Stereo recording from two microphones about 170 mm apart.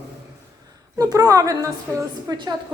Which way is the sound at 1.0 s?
20° right (ahead or behind).